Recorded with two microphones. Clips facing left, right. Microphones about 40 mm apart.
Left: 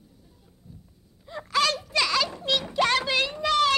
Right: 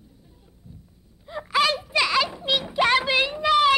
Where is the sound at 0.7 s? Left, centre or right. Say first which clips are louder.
Right 1 dB; right.